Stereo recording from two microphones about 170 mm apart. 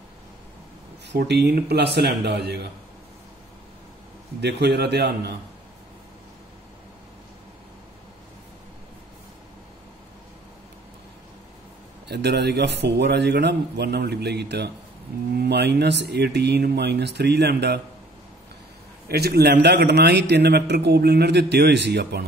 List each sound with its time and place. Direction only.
1.0 s a man's voice: 85° right
4.4 s a man's voice: 80° right
12.1 s a man's voice: 80° right
19.0 s a man's voice: 70° right (ahead or behind); by 22.2 s 85° right